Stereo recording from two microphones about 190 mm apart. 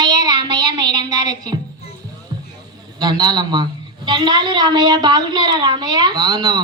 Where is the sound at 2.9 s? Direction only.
20° right (ahead or behind).